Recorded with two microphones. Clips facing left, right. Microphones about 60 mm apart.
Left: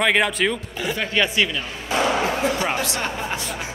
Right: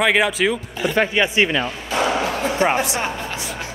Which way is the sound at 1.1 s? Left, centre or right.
Right.